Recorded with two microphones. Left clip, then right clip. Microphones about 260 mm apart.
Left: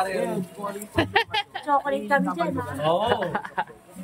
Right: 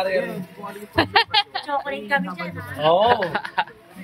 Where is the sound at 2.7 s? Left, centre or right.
Centre.